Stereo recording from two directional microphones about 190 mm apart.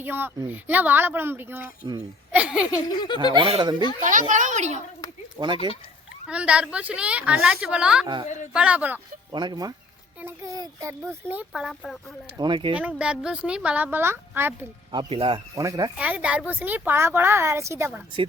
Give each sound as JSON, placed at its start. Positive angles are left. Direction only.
{"t": 0.0, "sound": "speech", "side_deg": -10}
{"t": 2.9, "sound": "speech", "side_deg": 25}
{"t": 3.3, "sound": "speech", "side_deg": -30}
{"t": 4.0, "sound": "a child's voice", "side_deg": -45}
{"t": 5.4, "sound": "speech", "side_deg": -20}
{"t": 6.2, "sound": "speech", "side_deg": -5}
{"t": 8.0, "sound": "speech", "side_deg": -20}
{"t": 8.5, "sound": "speech", "side_deg": -5}
{"t": 9.3, "sound": "speech", "side_deg": -25}
{"t": 12.4, "sound": "speech", "side_deg": -25}
{"t": 12.7, "sound": "speech", "side_deg": -5}
{"t": 14.9, "sound": "speech", "side_deg": -25}
{"t": 16.0, "sound": "speech", "side_deg": -5}